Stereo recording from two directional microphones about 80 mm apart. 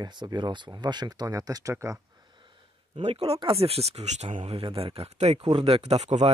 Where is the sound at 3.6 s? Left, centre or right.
Right.